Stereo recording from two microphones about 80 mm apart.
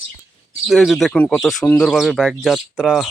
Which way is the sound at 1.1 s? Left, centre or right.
Centre.